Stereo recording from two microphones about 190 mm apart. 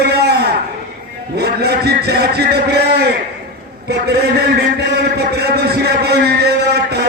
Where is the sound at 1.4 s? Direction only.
60° right (ahead or behind).